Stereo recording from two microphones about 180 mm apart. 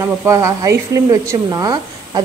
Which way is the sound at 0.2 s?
15° right (ahead or behind).